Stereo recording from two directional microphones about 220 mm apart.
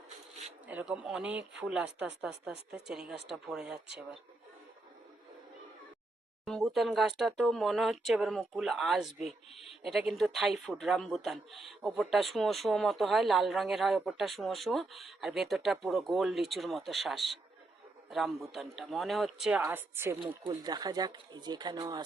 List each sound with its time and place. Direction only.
0.7 s speech: 5° right (ahead or behind)
6.4 s speech: centre (ahead or behind); by 22.0 s 20° right (ahead or behind)